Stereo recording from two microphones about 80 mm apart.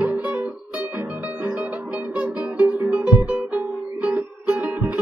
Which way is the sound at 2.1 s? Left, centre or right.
Centre.